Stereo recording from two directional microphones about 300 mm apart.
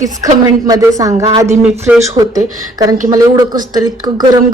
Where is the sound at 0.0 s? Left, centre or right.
Centre.